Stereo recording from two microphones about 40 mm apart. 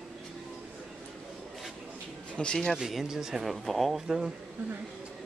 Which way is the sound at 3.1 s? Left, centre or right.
Centre.